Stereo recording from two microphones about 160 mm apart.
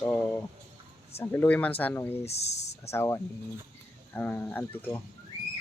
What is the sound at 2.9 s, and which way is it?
Speech, 15° left (ahead or behind).